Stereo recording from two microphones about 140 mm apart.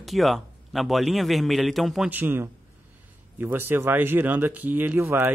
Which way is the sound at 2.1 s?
15° right (ahead or behind).